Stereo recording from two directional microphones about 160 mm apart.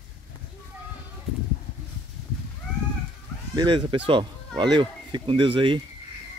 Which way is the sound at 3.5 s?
30° right (ahead or behind).